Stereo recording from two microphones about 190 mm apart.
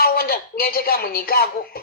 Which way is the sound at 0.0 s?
50° left (ahead or behind).